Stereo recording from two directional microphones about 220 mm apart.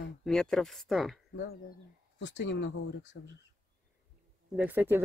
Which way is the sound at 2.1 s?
50° left (ahead or behind).